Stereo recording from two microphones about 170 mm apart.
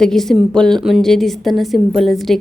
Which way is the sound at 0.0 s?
Centre (ahead or behind).